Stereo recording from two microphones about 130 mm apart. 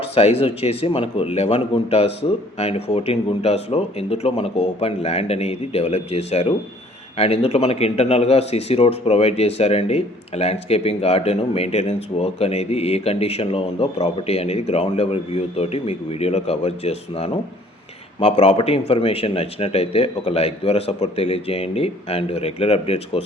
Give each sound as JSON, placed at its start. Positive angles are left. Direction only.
{"t": 0.0, "sound": "a man's voice", "side_deg": 50}